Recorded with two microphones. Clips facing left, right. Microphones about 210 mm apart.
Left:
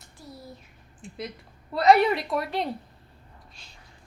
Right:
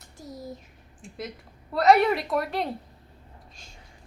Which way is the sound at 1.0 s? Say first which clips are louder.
Even; centre (ahead or behind).